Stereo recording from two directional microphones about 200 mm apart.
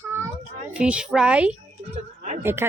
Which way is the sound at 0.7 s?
5° right (ahead or behind).